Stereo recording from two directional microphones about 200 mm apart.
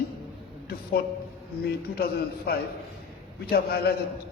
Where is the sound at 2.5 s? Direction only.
50° left (ahead or behind).